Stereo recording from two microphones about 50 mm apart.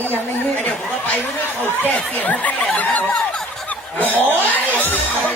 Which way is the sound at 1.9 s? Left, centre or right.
Left.